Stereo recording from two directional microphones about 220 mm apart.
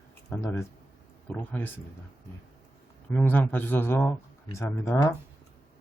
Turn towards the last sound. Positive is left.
turn(degrees=15)  # may be behind; listen again after turning